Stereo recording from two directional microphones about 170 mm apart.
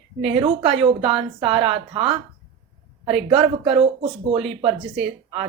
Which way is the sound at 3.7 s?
35° right (ahead or behind).